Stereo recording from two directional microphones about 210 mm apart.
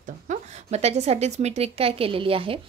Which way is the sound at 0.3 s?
30° right (ahead or behind).